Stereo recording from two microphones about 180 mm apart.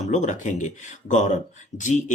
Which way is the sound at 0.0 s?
40° left (ahead or behind).